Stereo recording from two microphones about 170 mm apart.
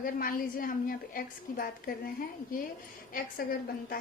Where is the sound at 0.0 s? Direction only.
55° left (ahead or behind).